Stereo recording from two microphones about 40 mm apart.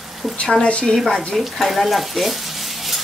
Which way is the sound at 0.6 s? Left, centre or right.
Left.